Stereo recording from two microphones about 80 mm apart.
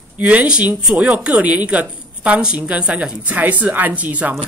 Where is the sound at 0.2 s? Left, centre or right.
Centre.